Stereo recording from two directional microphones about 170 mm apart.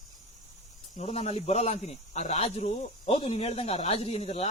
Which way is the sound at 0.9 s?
40° left (ahead or behind).